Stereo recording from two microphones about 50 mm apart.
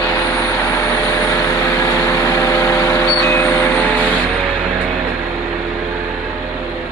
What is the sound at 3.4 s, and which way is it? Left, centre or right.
Vehicle, left.